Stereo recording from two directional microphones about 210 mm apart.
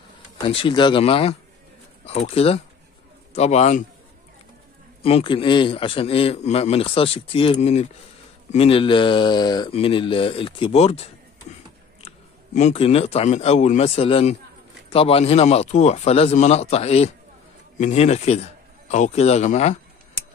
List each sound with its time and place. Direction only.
0.5 s a man's voice: 25° left (ahead or behind)
5.0 s a man's voice: 25° left (ahead or behind)
11.5 s a sound: 35° left (ahead or behind)
12.5 s a man's voice: 30° left (ahead or behind)